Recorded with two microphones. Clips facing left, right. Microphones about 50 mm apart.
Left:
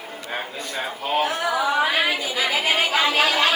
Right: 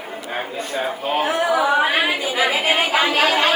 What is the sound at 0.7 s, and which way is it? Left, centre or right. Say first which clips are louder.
A woman's voice: right 2 dB; right.